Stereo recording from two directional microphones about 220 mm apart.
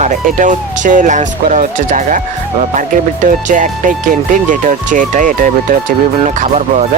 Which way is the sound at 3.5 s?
35° right (ahead or behind).